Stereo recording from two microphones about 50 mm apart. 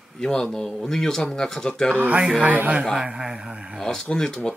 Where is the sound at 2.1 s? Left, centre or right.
Right.